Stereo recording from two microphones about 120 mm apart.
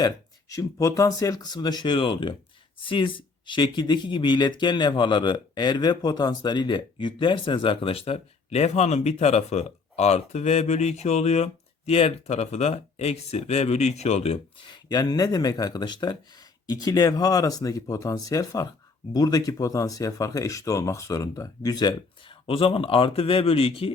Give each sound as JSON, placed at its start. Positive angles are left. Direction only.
{"t": 0.0, "sound": "speech", "side_deg": 30}
{"t": 14.6, "sound": "speech", "side_deg": 35}